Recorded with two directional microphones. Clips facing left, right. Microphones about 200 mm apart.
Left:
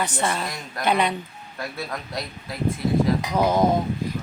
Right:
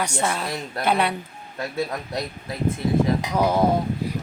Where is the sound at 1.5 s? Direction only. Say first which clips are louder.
Right 4 dB; 20° right (ahead or behind).